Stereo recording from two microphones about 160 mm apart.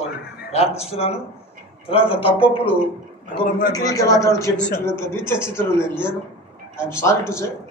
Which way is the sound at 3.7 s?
20° left (ahead or behind).